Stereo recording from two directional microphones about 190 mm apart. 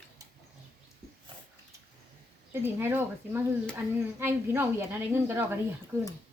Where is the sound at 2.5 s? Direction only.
10° right (ahead or behind).